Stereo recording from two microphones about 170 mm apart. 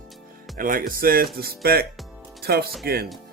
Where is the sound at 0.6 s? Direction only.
55° right (ahead or behind).